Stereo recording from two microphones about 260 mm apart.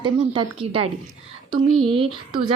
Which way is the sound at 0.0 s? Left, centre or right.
Centre.